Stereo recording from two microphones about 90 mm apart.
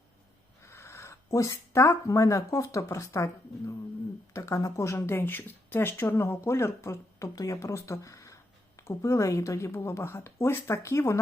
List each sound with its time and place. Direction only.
0.6 s speech: 30° left (ahead or behind)
4.4 s speech: 35° left (ahead or behind)